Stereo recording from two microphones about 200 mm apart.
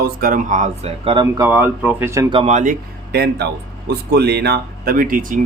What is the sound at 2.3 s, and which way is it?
Speech, 30° right (ahead or behind).